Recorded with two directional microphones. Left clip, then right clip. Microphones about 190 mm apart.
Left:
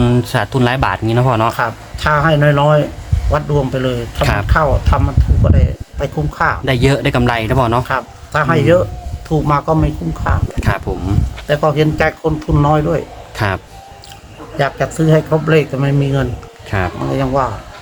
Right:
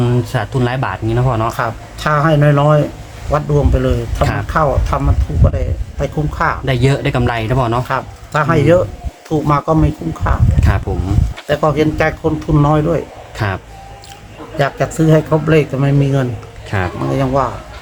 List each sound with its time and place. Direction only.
0.0 s speech: 45° left (ahead or behind)
1.5 s speech: centre (ahead or behind)
4.2 s speech: 45° left (ahead or behind)
4.4 s speech: centre (ahead or behind)
6.7 s speech: 45° left (ahead or behind)
7.9 s speech: centre (ahead or behind)
10.7 s speech: 45° left (ahead or behind)
11.4 s speech: centre (ahead or behind)
13.3 s a man's voice: 45° left (ahead or behind)
14.6 s speech: 10° right (ahead or behind)
16.6 s speech: 30° left (ahead or behind)
17.1 s speech: centre (ahead or behind)